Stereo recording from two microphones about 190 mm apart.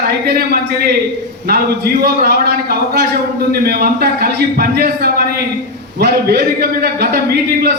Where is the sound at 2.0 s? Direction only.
55° right (ahead or behind).